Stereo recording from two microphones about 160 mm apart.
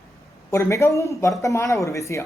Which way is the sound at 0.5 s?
15° left (ahead or behind).